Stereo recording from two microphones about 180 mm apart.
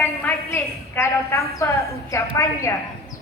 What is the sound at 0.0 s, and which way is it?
A woman's voice, 10° left (ahead or behind).